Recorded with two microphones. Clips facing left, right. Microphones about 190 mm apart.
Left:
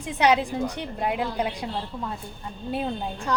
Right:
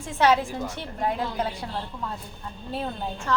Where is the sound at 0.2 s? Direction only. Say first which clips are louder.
Even; 15° left (ahead or behind).